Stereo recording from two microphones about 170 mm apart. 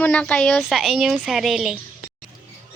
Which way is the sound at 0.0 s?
10° left (ahead or behind).